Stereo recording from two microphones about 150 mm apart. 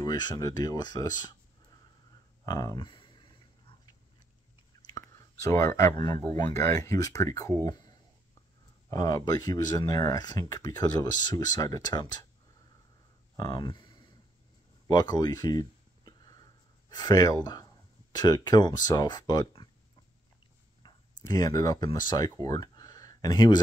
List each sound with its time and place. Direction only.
0.0 s speech: 25° left (ahead or behind)
2.4 s a sound: 25° left (ahead or behind)
5.1 s speech: 20° left (ahead or behind)
8.9 s speech: 25° left (ahead or behind)
13.4 s speech: 30° left (ahead or behind)
14.9 s a sound: 25° left (ahead or behind)
16.9 s speech: 25° left (ahead or behind)
20.8 s speech: 25° left (ahead or behind)